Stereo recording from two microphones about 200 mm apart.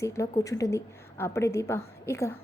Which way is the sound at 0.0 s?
15° left (ahead or behind).